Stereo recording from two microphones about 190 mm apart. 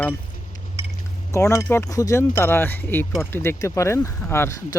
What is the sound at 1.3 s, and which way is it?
Speech, 15° left (ahead or behind).